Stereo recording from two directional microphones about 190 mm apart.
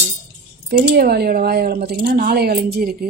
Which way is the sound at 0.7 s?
55° right (ahead or behind).